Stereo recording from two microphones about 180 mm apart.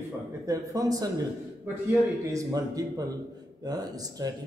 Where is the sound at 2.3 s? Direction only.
20° right (ahead or behind).